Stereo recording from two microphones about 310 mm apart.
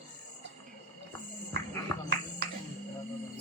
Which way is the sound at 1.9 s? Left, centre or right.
Centre.